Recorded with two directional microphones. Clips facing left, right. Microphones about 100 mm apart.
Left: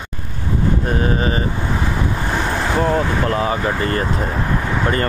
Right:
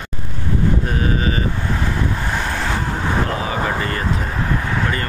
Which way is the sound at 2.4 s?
10° left (ahead or behind).